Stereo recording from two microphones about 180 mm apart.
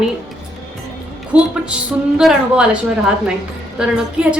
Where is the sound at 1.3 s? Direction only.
5° right (ahead or behind).